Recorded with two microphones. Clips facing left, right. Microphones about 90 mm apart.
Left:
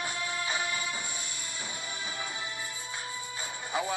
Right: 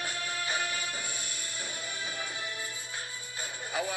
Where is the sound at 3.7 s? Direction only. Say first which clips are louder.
Left 2 dB; 30° left (ahead or behind).